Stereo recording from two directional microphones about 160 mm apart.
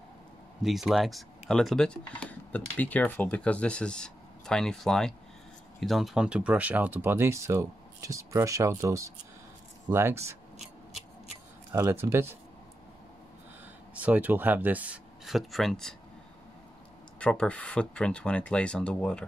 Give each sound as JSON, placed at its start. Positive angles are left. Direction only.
{"t": 0.6, "sound": "speech", "side_deg": 0}
{"t": 11.7, "sound": "speech", "side_deg": -15}
{"t": 13.9, "sound": "speech", "side_deg": -10}
{"t": 17.2, "sound": "speech", "side_deg": 5}